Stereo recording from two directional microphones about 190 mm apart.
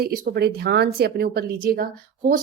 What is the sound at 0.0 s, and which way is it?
A woman's voice, 55° right (ahead or behind).